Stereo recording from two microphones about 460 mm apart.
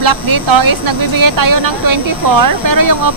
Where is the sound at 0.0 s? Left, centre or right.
Right.